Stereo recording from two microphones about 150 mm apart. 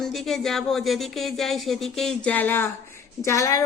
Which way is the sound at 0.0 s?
Centre (ahead or behind).